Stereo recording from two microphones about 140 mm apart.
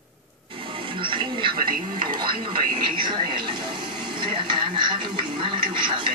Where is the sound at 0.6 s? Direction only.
40° right (ahead or behind).